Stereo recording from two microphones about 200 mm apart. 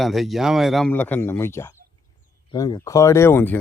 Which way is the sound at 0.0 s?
Centre (ahead or behind).